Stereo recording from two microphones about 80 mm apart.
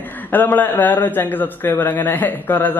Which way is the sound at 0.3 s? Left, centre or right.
Left.